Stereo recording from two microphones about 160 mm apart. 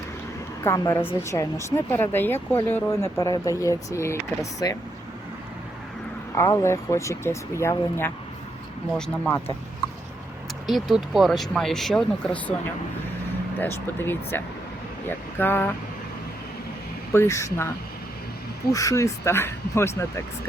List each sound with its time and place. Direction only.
0.6 s speech: 15° left (ahead or behind)
6.3 s speech: 20° left (ahead or behind)
10.7 s speech: centre (ahead or behind)
13.6 s speech: 15° left (ahead or behind)
17.1 s speech: 15° left (ahead or behind)
18.7 s speech: 20° left (ahead or behind)